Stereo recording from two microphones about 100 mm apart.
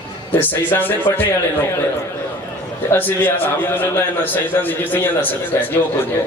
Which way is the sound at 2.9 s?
20° left (ahead or behind).